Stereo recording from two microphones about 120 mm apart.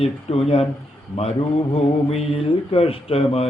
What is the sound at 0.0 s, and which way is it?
A man's voice, 55° left (ahead or behind).